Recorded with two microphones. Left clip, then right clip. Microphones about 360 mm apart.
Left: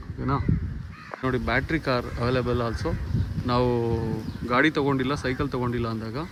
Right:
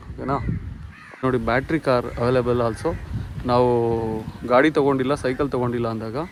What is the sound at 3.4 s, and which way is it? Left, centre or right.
Speech, centre.